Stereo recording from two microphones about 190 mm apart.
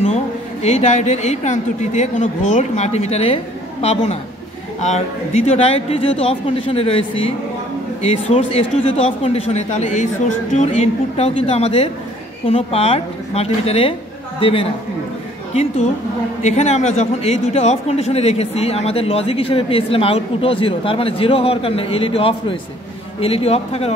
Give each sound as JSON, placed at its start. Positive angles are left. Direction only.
{"t": 0.1, "sound": "a man's voice", "side_deg": 35}
{"t": 16.4, "sound": "speech", "side_deg": 35}